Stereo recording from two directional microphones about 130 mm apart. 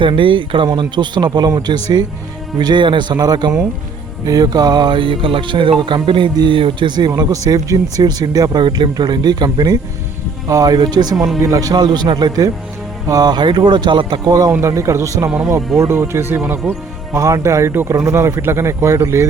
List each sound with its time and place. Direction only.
0.0 s a man's voice: 40° right (ahead or behind); by 17.2 s 10° right (ahead or behind)
17.2 s speech: 25° right (ahead or behind)